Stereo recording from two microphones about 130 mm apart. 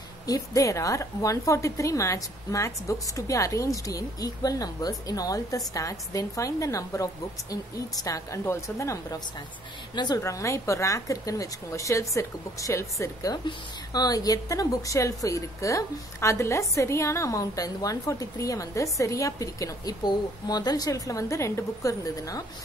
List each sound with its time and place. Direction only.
0.3 s a woman's voice: 25° left (ahead or behind)